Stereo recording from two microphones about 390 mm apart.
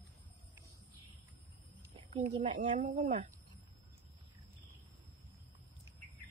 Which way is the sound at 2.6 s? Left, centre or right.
Centre.